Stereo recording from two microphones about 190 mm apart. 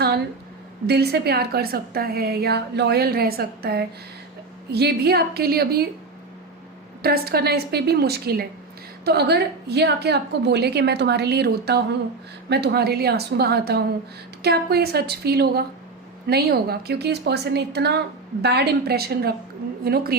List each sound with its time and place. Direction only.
0.9 s a woman's voice: 60° right (ahead or behind)
7.0 s a woman's voice: 55° right (ahead or behind)